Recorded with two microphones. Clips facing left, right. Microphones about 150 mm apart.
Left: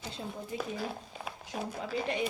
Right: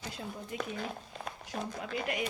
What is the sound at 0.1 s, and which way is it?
Speech, 30° left (ahead or behind).